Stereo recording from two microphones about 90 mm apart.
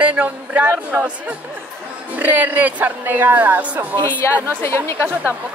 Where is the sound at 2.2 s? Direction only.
20° right (ahead or behind).